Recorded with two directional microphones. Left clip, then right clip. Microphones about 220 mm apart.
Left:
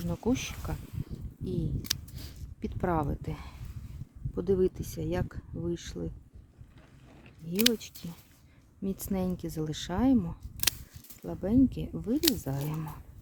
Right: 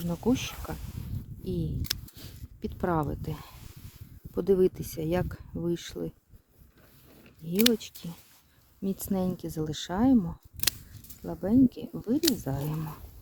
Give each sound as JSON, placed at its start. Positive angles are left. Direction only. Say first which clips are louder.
{"t": 0.0, "sound": "speech", "louder": "right 2 dB", "side_deg": -10}
{"t": 2.1, "sound": "speech", "louder": "even", "side_deg": -10}
{"t": 4.4, "sound": "speech", "louder": "right 4 dB", "side_deg": -25}
{"t": 7.4, "sound": "speech", "louder": "right 2 dB", "side_deg": -15}